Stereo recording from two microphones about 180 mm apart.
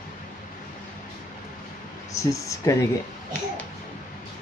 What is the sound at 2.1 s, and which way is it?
Speech, 15° left (ahead or behind).